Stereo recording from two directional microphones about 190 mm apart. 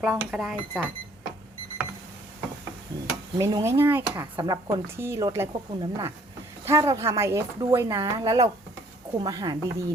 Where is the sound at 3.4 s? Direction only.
15° right (ahead or behind).